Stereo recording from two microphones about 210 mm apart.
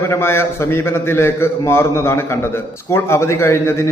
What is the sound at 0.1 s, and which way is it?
A man's voice, 10° left (ahead or behind).